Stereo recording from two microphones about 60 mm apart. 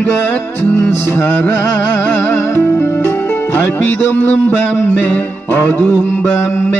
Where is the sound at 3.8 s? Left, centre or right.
Left.